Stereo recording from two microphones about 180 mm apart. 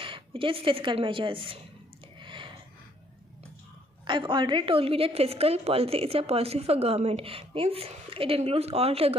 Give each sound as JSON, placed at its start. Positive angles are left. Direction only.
{"t": 0.0, "sound": "speech", "side_deg": -30}
{"t": 2.1, "sound": "a sound", "side_deg": -25}
{"t": 4.0, "sound": "a woman's voice", "side_deg": -25}